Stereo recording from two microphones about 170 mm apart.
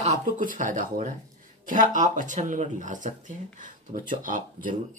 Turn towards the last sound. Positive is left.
turn(degrees=-50)  # may be behind; listen again after turning